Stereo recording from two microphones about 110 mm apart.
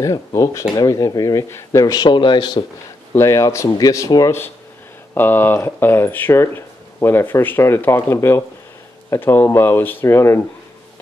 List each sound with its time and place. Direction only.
0.0 s speech: 30° left (ahead or behind)
2.0 s speech: 45° left (ahead or behind)
3.1 s speech: 30° left (ahead or behind)
5.1 s speech: 20° left (ahead or behind)